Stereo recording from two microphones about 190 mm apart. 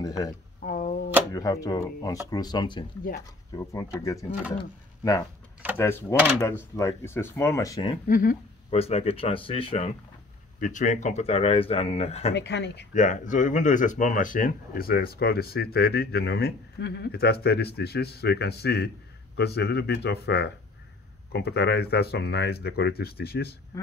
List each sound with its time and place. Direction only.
0.0 s speech: 20° left (ahead or behind)
0.6 s a sound: 45° left (ahead or behind)
1.3 s speech: 20° left (ahead or behind)
5.8 s speech: 15° left (ahead or behind)
8.1 s speech: 45° left (ahead or behind)
8.6 s speech: 30° left (ahead or behind)
12.4 s speech: 65° left (ahead or behind)
12.9 s speech: 40° left (ahead or behind)
23.7 s speech: 20° left (ahead or behind)